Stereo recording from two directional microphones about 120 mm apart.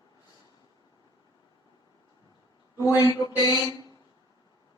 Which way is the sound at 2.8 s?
30° left (ahead or behind).